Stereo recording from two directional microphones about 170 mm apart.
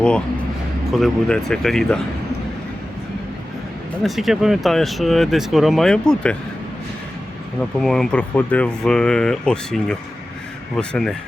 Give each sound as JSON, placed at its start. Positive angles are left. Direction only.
{"t": 0.9, "sound": "speech", "side_deg": 0}
{"t": 4.0, "sound": "speech", "side_deg": 0}
{"t": 7.8, "sound": "speech", "side_deg": 0}